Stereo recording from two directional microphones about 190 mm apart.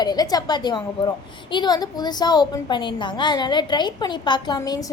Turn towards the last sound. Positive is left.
turn(degrees=20)  # may be behind; listen again after turning